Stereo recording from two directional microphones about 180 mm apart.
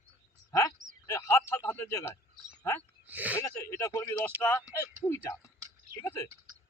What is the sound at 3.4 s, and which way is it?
Speech, 15° left (ahead or behind).